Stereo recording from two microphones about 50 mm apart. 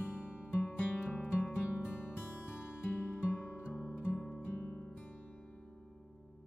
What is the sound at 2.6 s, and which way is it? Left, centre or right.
Music, left.